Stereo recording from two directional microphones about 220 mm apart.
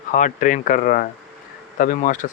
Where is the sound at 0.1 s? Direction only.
35° left (ahead or behind).